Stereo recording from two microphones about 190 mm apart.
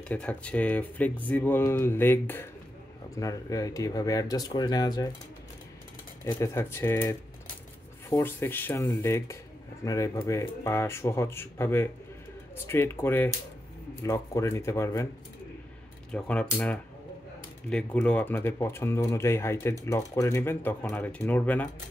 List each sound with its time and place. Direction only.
0.1 s speech: 5° left (ahead or behind)
6.4 s speech: 15° left (ahead or behind)
16.1 s speech: 5° left (ahead or behind)